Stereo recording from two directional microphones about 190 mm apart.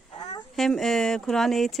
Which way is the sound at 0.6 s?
Centre (ahead or behind).